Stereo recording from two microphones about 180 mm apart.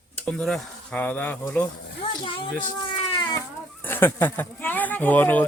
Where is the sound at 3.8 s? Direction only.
10° left (ahead or behind).